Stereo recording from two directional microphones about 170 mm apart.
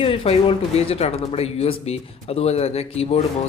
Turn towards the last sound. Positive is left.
turn(degrees=35)  # may be behind; listen again after turning